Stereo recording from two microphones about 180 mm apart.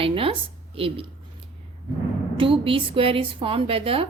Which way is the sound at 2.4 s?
30° right (ahead or behind).